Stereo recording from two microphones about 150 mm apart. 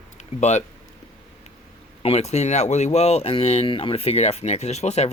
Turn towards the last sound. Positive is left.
turn(degrees=45)  # may be behind; listen again after turning